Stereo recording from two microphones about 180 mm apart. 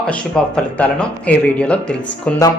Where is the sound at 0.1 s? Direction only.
5° left (ahead or behind).